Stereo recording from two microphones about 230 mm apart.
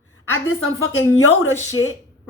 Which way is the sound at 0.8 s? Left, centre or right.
Left.